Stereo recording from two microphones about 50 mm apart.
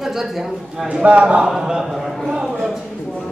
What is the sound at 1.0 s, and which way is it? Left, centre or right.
Speech, right.